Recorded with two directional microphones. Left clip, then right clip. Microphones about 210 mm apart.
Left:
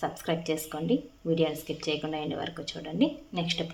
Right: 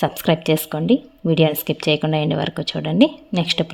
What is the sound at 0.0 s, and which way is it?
Speech, 50° right (ahead or behind).